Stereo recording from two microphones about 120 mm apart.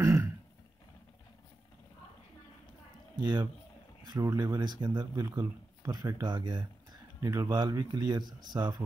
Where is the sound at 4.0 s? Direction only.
35° right (ahead or behind).